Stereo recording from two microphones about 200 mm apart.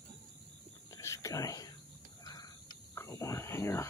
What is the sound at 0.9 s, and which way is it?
Whispering, 15° left (ahead or behind).